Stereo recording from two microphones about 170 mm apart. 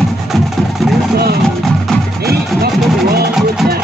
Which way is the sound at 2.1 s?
65° right (ahead or behind).